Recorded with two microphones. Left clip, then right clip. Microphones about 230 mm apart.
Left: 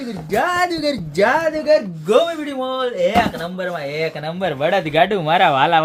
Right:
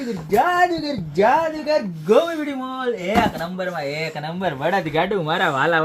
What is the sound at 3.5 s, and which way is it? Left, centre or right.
Speech, centre.